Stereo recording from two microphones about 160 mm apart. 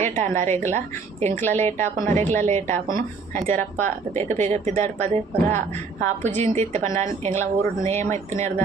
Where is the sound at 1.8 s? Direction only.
50° right (ahead or behind).